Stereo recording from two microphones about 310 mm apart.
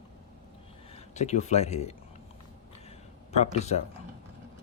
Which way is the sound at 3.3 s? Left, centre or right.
Left.